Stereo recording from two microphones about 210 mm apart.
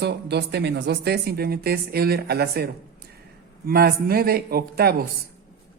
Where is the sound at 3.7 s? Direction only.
45° right (ahead or behind).